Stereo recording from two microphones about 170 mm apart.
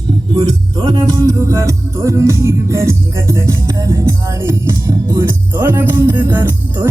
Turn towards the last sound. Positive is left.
turn(degrees=-15)  # may be behind; listen again after turning